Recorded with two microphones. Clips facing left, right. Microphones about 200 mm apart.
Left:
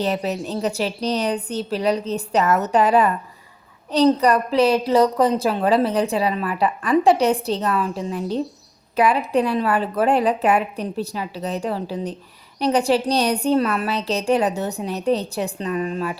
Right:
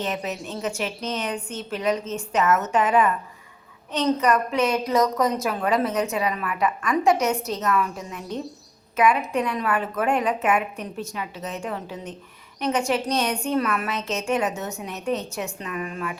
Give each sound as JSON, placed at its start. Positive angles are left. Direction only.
{"t": 0.0, "sound": "a woman's voice", "side_deg": 35}